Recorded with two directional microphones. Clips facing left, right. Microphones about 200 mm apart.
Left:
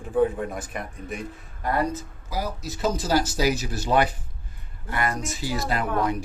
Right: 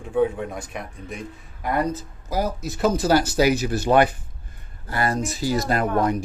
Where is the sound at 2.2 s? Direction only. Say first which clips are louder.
Right 6 dB; 45° right (ahead or behind).